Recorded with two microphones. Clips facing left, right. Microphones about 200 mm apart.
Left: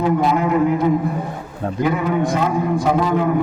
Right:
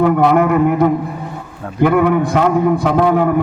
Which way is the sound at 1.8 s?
60° right (ahead or behind).